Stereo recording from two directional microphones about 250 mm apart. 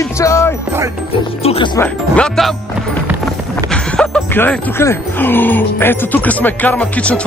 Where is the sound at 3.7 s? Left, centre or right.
Centre.